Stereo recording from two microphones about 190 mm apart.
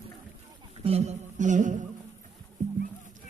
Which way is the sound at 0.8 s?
30° right (ahead or behind).